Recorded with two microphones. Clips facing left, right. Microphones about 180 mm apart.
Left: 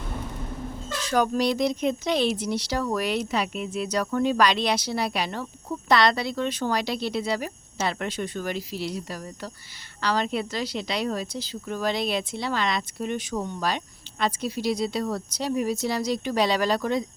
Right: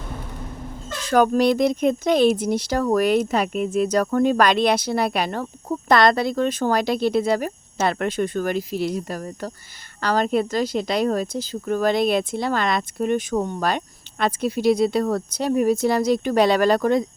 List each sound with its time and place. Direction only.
1.1 s speech: 55° right (ahead or behind)